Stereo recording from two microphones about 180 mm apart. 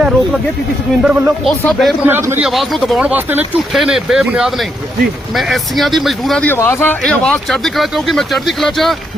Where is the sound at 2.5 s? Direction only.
Centre (ahead or behind).